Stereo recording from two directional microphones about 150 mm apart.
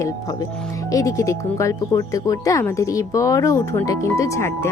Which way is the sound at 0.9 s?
20° left (ahead or behind).